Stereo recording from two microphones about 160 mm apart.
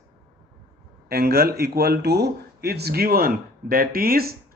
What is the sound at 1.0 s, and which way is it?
Speech, 75° right (ahead or behind).